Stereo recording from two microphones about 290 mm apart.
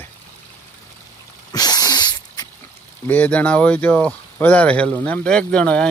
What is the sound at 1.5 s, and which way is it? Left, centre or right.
Sneeze, centre.